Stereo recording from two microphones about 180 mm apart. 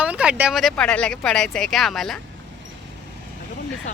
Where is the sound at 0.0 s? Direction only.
5° right (ahead or behind).